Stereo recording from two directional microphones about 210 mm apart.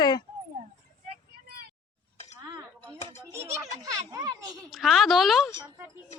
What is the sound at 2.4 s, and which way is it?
Chink, 20° right (ahead or behind).